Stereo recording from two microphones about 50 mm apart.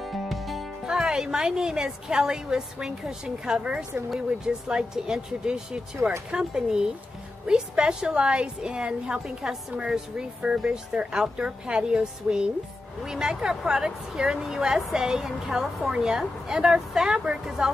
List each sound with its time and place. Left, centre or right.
0.0 s music: centre
0.8 s a woman's voice: centre